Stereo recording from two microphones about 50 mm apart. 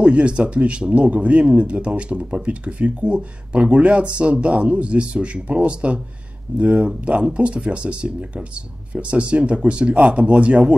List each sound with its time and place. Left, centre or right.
0.0 s speech: right